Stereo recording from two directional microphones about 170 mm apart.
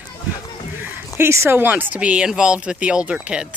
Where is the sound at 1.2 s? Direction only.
15° right (ahead or behind).